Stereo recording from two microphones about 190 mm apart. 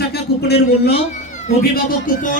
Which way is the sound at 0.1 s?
55° left (ahead or behind).